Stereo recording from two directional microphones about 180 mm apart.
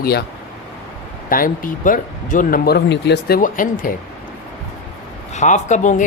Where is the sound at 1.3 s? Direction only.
50° left (ahead or behind).